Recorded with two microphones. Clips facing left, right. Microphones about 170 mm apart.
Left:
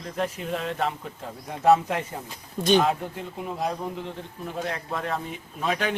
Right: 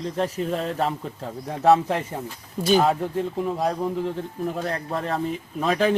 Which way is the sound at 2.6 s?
5° right (ahead or behind).